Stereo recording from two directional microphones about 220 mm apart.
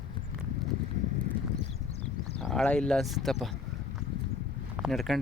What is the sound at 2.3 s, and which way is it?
Speech, 5° left (ahead or behind).